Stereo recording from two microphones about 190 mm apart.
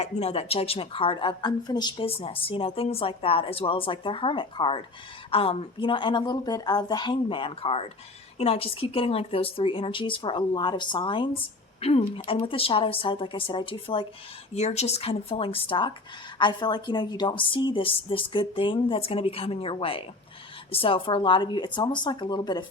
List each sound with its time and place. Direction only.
0.0 s a woman's voice: 35° left (ahead or behind)